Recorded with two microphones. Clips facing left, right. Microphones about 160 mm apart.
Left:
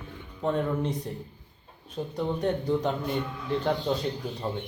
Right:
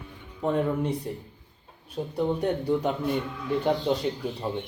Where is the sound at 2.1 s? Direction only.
10° right (ahead or behind).